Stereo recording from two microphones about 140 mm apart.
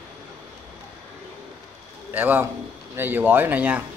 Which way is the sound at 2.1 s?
15° right (ahead or behind).